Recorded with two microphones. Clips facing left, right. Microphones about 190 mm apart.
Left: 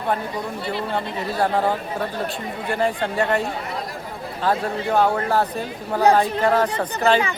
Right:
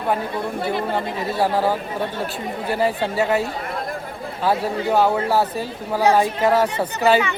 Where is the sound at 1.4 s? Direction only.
5° right (ahead or behind).